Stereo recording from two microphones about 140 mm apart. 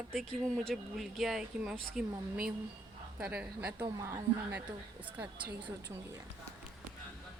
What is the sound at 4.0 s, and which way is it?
Speech, 20° right (ahead or behind).